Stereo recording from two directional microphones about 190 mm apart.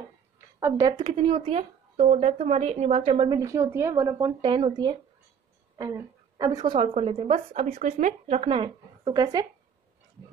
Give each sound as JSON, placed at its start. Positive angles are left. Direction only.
{"t": 0.6, "sound": "speech", "side_deg": -15}